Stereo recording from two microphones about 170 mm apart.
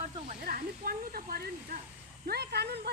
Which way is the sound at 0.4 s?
55° right (ahead or behind).